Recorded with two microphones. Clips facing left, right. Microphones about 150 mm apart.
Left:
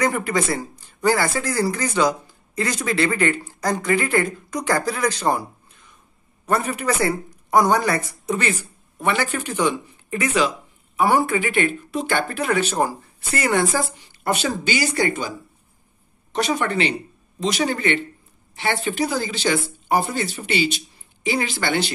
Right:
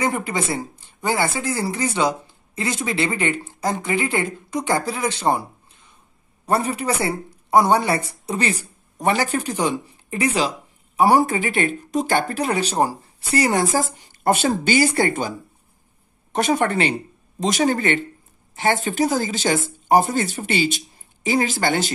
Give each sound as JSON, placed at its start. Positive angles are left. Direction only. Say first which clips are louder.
{"t": 0.0, "sound": "speech", "louder": "left 2 dB", "side_deg": -25}